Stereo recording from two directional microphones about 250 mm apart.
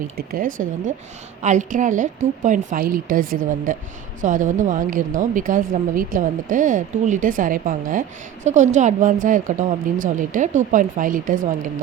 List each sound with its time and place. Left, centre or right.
0.2 s a woman's voice: right